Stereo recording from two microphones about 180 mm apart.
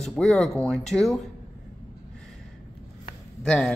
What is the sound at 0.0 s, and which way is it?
Speech, centre (ahead or behind).